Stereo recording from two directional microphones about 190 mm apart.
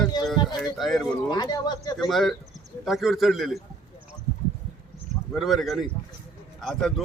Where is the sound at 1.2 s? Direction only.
20° left (ahead or behind).